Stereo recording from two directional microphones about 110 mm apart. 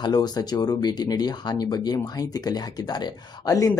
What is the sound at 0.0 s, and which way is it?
Speech, 40° left (ahead or behind).